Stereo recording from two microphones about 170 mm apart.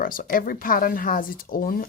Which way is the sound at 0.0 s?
55° left (ahead or behind).